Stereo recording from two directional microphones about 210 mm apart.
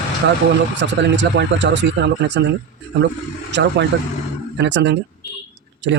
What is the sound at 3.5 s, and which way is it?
Speech, 55° right (ahead or behind).